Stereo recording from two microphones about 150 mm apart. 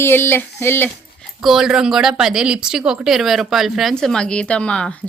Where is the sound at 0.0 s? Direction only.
15° left (ahead or behind).